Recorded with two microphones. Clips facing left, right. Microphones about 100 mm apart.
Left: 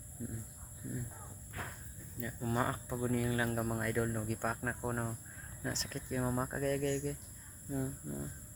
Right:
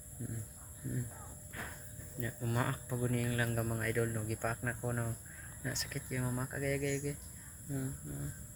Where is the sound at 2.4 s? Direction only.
20° left (ahead or behind).